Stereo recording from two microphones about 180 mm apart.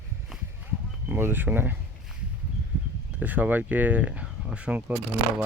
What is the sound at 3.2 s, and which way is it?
Speech, 10° right (ahead or behind).